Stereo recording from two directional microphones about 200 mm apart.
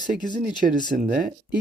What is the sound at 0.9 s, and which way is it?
Speech, 45° right (ahead or behind).